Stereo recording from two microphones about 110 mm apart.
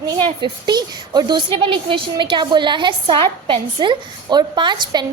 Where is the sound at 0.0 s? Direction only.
40° right (ahead or behind).